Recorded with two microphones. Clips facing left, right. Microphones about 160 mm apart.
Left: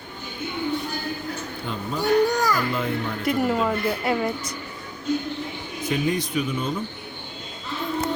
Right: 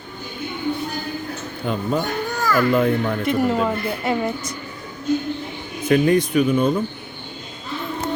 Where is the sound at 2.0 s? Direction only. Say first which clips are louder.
Left 5 dB; 10° left (ahead or behind).